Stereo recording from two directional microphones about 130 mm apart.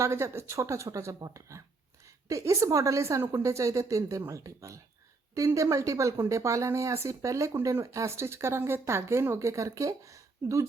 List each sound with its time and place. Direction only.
0.0 s speech: 20° right (ahead or behind)